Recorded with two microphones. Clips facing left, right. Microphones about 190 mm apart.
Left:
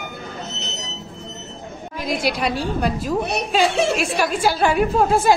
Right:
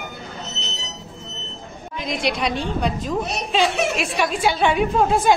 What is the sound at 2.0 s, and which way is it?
A woman's voice, 5° left (ahead or behind).